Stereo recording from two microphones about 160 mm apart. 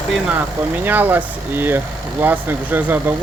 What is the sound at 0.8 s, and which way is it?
Speech, 10° right (ahead or behind).